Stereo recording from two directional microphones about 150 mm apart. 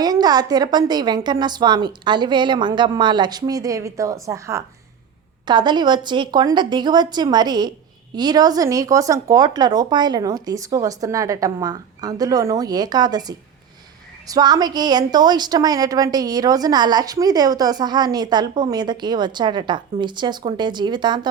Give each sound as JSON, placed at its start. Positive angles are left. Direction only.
{"t": 0.0, "sound": "a woman's voice", "side_deg": -25}
{"t": 5.5, "sound": "a woman's voice", "side_deg": -30}